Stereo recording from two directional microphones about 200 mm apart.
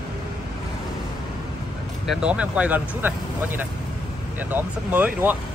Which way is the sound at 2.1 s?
5° right (ahead or behind).